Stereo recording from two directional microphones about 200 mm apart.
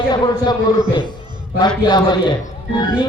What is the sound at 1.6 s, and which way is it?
A man's voice, 20° left (ahead or behind).